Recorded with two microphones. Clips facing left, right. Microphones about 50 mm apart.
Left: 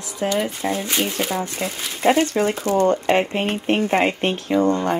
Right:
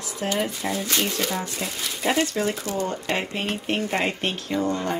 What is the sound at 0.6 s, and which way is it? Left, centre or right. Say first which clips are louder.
Speech: left 4 dB; left.